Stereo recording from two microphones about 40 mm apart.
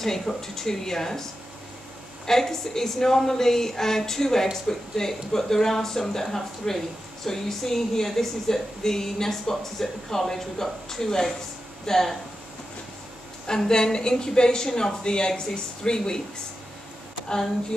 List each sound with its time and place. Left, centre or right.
0.0 s speech: centre
2.2 s speech: centre
13.5 s speech: centre
17.3 s speech: centre